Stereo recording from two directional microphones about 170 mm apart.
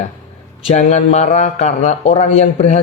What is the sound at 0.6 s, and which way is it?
A man's voice, 40° left (ahead or behind).